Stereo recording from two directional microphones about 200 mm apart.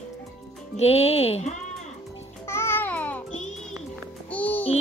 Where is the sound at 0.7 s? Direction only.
30° left (ahead or behind).